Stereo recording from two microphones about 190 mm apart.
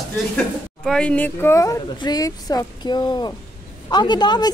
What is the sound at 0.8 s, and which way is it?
A woman's voice, 5° left (ahead or behind).